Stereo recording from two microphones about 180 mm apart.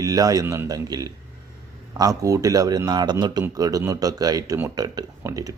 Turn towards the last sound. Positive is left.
turn(degrees=-20)  # may be behind; listen again after turning